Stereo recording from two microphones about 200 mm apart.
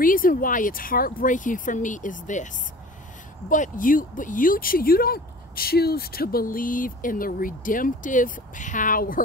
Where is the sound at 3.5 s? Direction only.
40° left (ahead or behind).